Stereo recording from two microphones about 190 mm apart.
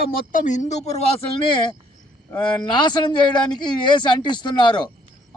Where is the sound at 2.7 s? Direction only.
25° left (ahead or behind).